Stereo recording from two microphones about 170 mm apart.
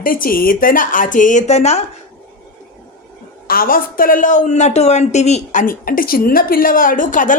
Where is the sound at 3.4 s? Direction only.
60° left (ahead or behind).